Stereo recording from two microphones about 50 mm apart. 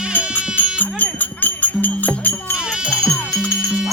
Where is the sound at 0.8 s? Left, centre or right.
Left.